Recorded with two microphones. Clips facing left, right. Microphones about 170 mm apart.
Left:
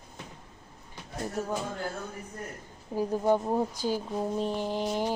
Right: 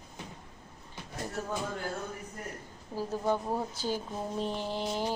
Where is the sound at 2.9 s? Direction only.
15° left (ahead or behind).